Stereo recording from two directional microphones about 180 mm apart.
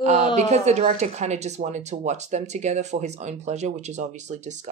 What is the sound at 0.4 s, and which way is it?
Speech, 40° right (ahead or behind).